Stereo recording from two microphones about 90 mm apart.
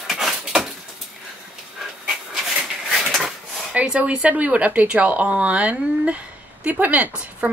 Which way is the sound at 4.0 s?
15° right (ahead or behind).